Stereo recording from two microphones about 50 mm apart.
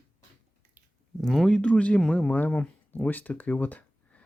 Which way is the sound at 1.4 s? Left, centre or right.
Centre.